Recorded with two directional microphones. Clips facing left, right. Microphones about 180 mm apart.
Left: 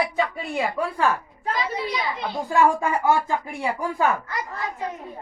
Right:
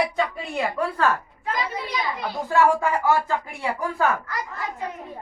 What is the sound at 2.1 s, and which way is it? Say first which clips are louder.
Speech: even; 15° left (ahead or behind).